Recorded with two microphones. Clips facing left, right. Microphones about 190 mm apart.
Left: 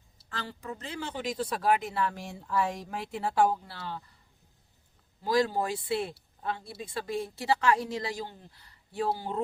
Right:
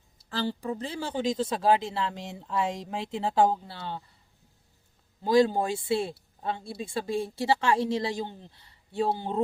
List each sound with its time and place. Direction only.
0.3 s speech: 30° right (ahead or behind)
5.2 s speech: 25° right (ahead or behind)